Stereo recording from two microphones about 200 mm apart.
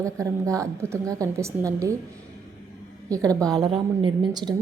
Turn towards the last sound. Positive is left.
turn(degrees=-20)  # may be behind; listen again after turning